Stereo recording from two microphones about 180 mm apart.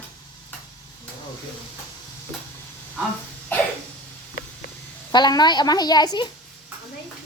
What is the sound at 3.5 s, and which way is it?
Cough, 10° left (ahead or behind).